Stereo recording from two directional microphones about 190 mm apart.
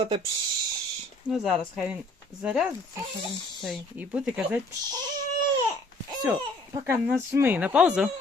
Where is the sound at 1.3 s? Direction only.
Centre (ahead or behind).